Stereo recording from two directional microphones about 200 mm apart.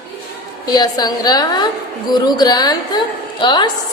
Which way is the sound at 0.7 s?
20° left (ahead or behind).